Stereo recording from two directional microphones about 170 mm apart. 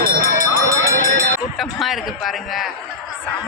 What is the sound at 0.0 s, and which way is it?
Run, 55° right (ahead or behind).